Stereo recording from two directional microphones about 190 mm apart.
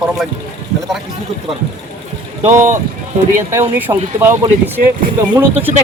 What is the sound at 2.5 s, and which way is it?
Speech, 40° right (ahead or behind).